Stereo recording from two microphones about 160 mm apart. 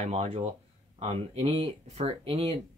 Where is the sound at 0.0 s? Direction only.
40° right (ahead or behind).